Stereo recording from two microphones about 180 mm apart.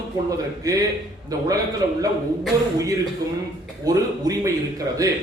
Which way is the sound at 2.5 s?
20° right (ahead or behind).